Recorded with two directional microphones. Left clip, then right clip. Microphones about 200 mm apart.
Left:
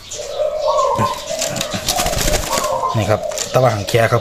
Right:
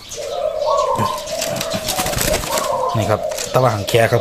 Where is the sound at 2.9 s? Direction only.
Centre (ahead or behind).